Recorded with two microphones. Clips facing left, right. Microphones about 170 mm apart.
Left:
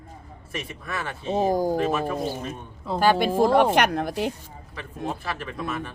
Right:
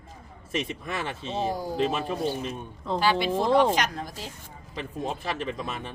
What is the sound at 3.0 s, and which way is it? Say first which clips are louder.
Speech: left 5 dB; 50° left (ahead or behind).